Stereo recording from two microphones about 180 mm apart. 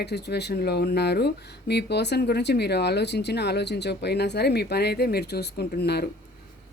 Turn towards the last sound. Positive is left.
turn(degrees=65)  # may be behind; listen again after turning